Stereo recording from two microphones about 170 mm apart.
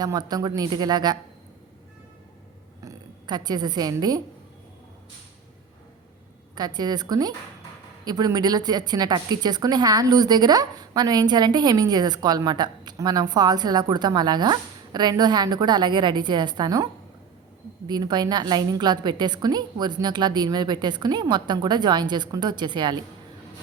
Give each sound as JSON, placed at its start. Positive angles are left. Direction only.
{"t": 0.0, "sound": "a woman's voice", "side_deg": -25}
{"t": 2.8, "sound": "a woman's voice", "side_deg": -25}
{"t": 6.6, "sound": "a woman's voice", "side_deg": -25}